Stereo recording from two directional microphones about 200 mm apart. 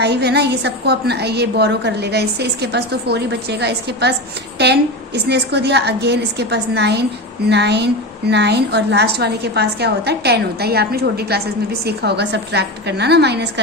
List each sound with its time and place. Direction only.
0.0 s a woman's voice: 55° right (ahead or behind)